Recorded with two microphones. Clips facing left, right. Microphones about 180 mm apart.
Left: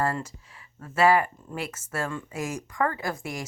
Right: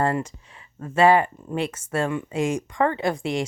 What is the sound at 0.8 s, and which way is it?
Speech, 25° right (ahead or behind).